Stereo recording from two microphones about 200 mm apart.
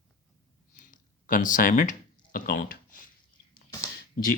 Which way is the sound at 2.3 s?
45° left (ahead or behind).